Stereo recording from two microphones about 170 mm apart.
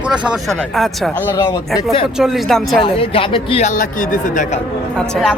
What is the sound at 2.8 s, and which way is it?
Speech, 30° left (ahead or behind).